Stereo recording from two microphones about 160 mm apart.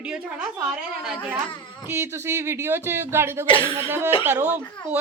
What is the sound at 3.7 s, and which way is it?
Speech, 15° right (ahead or behind).